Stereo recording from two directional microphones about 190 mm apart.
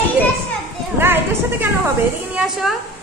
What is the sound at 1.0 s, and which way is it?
A woman's voice, 10° right (ahead or behind).